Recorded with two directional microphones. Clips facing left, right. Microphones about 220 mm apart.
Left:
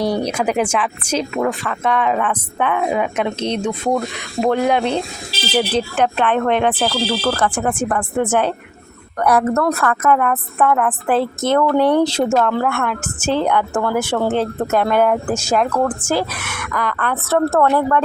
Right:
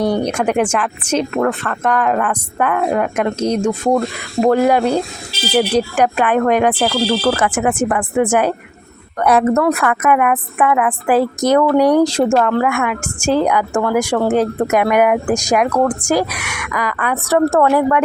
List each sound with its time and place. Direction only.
0.3 s speech: 5° left (ahead or behind); by 8.5 s 10° right (ahead or behind)
9.1 s speech: 20° right (ahead or behind)
9.5 s speech: centre (ahead or behind)
9.7 s speech: 15° right (ahead or behind)